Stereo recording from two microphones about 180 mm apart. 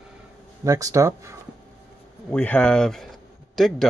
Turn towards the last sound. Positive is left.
turn(degrees=0)  # may be behind; listen again after turning